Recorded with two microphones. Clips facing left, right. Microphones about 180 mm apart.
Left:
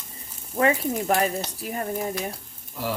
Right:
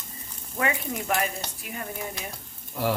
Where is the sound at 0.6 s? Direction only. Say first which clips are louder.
Left 6 dB; 35° left (ahead or behind).